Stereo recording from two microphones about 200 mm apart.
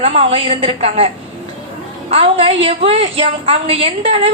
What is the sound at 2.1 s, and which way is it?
A woman's voice, 30° right (ahead or behind).